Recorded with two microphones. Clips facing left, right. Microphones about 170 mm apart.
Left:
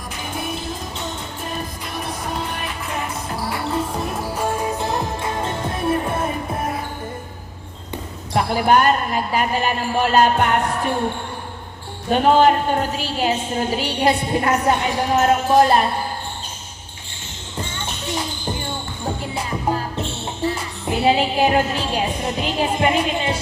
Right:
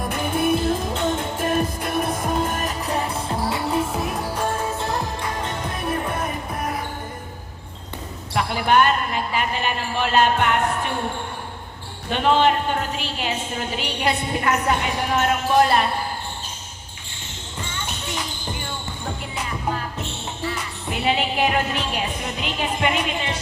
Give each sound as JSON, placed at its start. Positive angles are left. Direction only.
{"t": 0.1, "sound": "music", "side_deg": -55}
{"t": 3.8, "sound": "music", "side_deg": -5}
{"t": 4.4, "sound": "music", "side_deg": 10}
{"t": 8.3, "sound": "a woman's voice", "side_deg": 40}
{"t": 12.1, "sound": "a woman's voice", "side_deg": 40}
{"t": 19.0, "sound": "music", "side_deg": 30}
{"t": 22.4, "sound": "a woman's voice", "side_deg": 35}